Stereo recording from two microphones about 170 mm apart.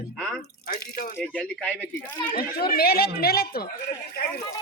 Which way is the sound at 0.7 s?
65° left (ahead or behind).